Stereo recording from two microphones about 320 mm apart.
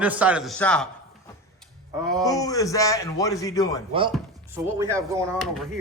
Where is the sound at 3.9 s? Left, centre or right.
Centre.